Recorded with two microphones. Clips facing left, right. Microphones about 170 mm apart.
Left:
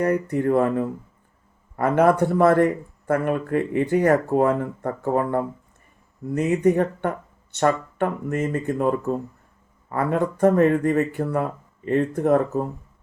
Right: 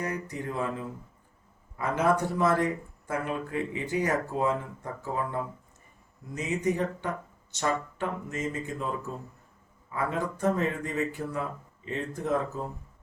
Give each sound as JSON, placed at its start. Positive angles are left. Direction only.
{"t": 0.0, "sound": "speech", "side_deg": 55}